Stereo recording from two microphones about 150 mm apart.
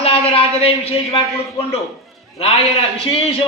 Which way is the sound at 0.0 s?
40° left (ahead or behind).